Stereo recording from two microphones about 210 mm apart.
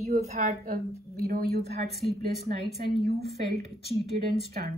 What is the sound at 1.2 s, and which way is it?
Speech, 45° right (ahead or behind).